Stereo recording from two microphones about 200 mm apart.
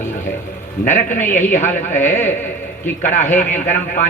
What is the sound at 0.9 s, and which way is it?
A man's voice, 40° left (ahead or behind).